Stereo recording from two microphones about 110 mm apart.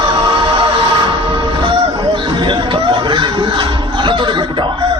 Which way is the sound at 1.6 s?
45° right (ahead or behind).